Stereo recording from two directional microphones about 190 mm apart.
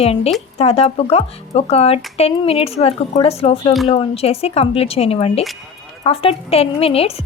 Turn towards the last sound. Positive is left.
turn(degrees=30)  # may be behind; listen again after turning